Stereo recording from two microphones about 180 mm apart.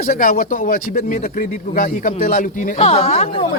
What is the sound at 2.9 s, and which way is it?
Speech, 35° left (ahead or behind).